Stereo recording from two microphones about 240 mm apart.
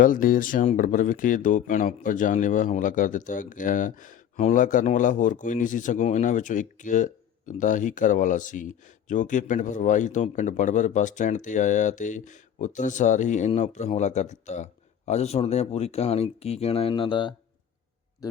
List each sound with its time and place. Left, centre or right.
0.0 s a man's voice: left; by 18.4 s centre